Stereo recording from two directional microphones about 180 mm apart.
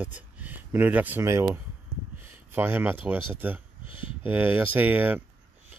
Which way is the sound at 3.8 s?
30° left (ahead or behind).